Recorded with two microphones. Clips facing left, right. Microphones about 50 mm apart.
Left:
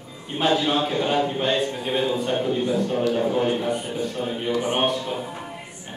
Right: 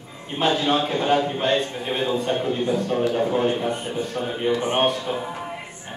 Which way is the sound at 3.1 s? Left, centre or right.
Centre.